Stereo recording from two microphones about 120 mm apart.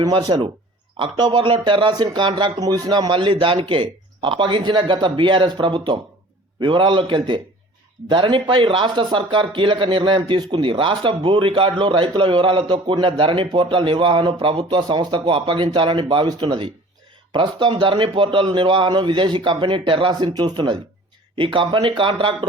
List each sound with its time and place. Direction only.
0.0 s speech: 35° right (ahead or behind)